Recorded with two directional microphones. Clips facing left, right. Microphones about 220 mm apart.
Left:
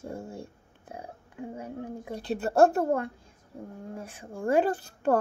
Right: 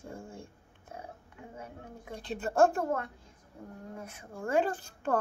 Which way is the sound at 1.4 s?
30° left (ahead or behind).